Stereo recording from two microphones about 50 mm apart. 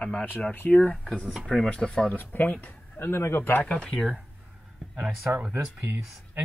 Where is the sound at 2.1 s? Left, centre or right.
Left.